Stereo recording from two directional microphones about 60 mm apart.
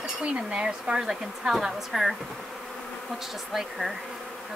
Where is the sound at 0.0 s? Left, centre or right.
Centre.